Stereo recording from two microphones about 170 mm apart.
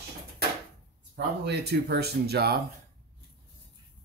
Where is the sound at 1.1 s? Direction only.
80° right.